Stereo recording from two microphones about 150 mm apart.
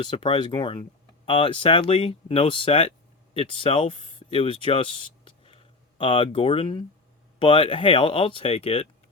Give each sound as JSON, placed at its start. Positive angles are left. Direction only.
{"t": 0.0, "sound": "speech", "side_deg": 35}